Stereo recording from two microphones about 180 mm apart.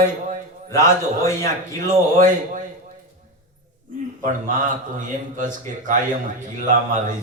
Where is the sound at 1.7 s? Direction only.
45° right (ahead or behind).